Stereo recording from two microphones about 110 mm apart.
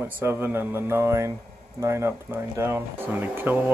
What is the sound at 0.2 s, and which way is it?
Speech, 20° right (ahead or behind).